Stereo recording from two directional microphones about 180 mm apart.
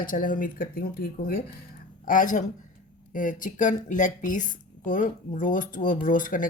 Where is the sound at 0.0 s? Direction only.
50° left (ahead or behind).